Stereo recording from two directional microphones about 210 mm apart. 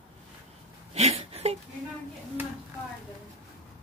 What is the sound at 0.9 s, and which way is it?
Speech, 30° right (ahead or behind).